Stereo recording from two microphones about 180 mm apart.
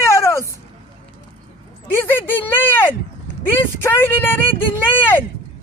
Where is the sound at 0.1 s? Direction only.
15° left (ahead or behind).